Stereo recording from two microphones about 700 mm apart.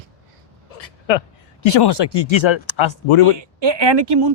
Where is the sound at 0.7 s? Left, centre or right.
Left.